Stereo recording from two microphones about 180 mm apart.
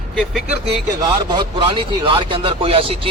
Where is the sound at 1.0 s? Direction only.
25° right (ahead or behind).